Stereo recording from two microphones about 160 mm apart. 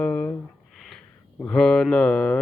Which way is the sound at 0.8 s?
Centre (ahead or behind).